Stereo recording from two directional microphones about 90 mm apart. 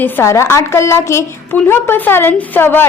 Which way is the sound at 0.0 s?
30° left (ahead or behind).